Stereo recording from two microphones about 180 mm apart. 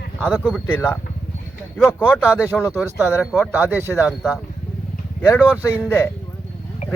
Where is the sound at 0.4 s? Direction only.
5° left (ahead or behind).